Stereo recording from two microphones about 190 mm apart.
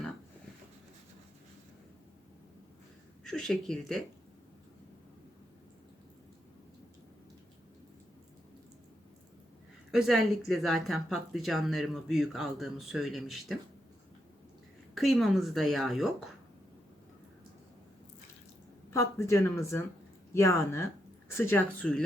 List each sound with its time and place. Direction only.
3.2 s speech: centre (ahead or behind)
9.9 s speech: centre (ahead or behind)
14.9 s speech: centre (ahead or behind)
18.9 s speech: 15° left (ahead or behind)